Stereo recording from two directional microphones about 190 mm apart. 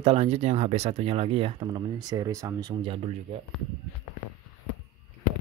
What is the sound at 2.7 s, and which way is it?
Speech, 30° right (ahead or behind).